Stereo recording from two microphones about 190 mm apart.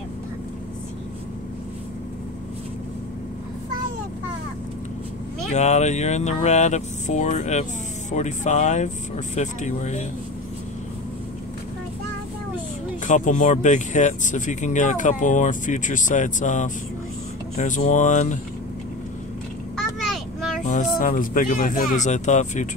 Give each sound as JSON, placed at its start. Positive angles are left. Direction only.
{"t": 5.5, "sound": "speech", "side_deg": 35}
{"t": 13.0, "sound": "speech", "side_deg": 40}
{"t": 20.6, "sound": "speech", "side_deg": 45}